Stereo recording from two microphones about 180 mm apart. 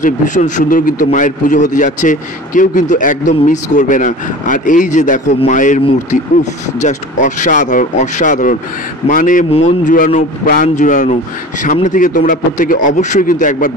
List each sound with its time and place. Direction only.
0.0 s a man's voice: 45° left (ahead or behind)